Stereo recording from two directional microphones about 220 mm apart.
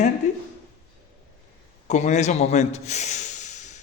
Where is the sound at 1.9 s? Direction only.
30° left (ahead or behind).